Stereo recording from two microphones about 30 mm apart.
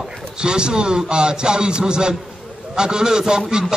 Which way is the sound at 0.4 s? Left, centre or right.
Right.